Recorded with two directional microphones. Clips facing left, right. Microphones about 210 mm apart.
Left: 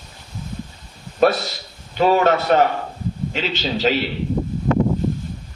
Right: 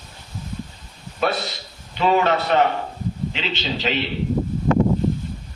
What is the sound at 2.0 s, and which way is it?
Speech, 45° left (ahead or behind).